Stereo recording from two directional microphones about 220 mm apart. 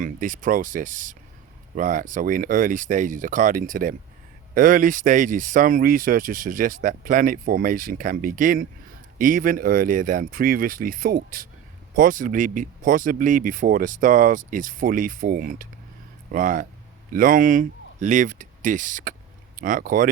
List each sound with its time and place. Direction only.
0.0 s speech: 35° right (ahead or behind)